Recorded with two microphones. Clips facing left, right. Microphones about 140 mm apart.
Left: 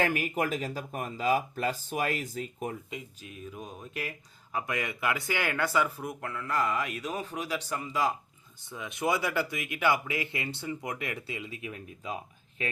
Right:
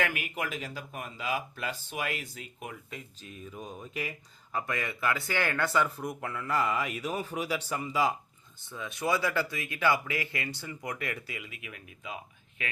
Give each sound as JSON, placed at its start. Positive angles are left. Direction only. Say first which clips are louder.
{"t": 0.0, "sound": "speech", "louder": "left 4 dB", "side_deg": 40}
{"t": 2.9, "sound": "speech", "louder": "left 3 dB", "side_deg": 10}
{"t": 4.5, "sound": "speech", "louder": "left 1 dB", "side_deg": 15}
{"t": 8.6, "sound": "speech", "louder": "left 2 dB", "side_deg": 15}